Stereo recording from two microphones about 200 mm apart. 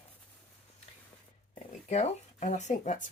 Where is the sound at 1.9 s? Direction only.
35° left (ahead or behind).